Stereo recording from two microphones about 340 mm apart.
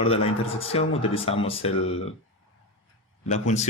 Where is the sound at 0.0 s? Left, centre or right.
Centre.